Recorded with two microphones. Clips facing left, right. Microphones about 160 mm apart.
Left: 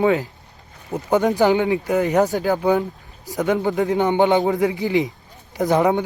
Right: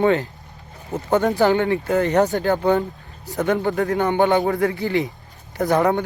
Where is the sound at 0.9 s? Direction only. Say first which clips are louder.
Left 1 dB; 15° left (ahead or behind).